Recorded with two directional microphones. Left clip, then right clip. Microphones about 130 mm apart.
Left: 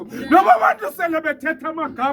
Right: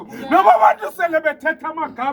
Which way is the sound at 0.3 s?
35° right (ahead or behind).